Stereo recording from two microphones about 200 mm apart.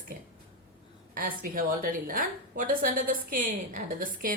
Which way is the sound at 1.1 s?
45° right (ahead or behind).